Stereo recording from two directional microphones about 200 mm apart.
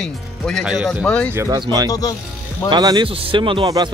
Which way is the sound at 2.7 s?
20° right (ahead or behind).